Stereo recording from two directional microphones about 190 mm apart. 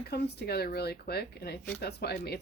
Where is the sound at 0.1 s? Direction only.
55° left (ahead or behind).